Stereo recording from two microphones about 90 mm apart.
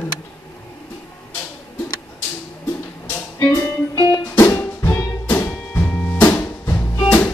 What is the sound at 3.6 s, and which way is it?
Music, 30° left (ahead or behind).